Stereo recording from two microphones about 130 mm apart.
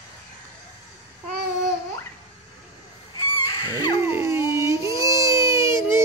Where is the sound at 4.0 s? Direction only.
20° right (ahead or behind).